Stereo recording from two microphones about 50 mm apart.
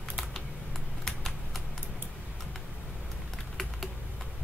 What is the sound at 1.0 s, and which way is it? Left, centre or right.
Typing, centre.